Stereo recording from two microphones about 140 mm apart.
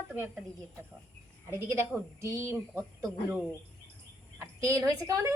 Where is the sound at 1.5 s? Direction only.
20° right (ahead or behind).